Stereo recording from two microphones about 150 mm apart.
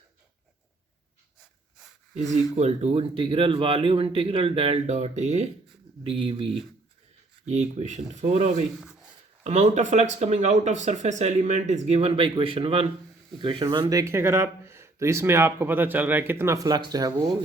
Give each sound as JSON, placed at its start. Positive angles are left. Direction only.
{"t": 2.1, "sound": "speech", "side_deg": -50}
{"t": 6.0, "sound": "speech", "side_deg": -35}
{"t": 7.8, "sound": "speech", "side_deg": -50}
{"t": 8.8, "sound": "a sound", "side_deg": -5}
{"t": 9.4, "sound": "speech", "side_deg": -50}